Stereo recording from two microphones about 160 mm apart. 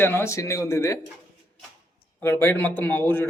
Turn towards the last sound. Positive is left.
turn(degrees=15)  # may be behind; listen again after turning